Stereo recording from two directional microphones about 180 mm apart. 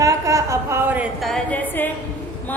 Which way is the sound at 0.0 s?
15° right (ahead or behind).